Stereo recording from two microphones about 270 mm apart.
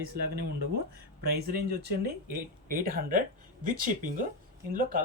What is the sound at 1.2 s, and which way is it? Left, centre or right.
Speech, right.